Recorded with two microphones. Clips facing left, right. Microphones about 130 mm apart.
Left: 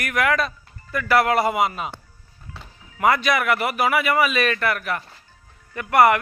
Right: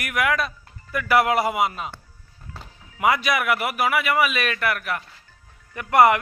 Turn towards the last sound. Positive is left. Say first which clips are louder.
# even
turn(degrees=-20)  # may be behind; listen again after turning